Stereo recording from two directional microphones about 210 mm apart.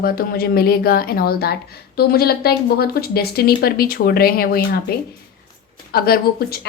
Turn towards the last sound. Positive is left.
turn(degrees=45)  # may be behind; listen again after turning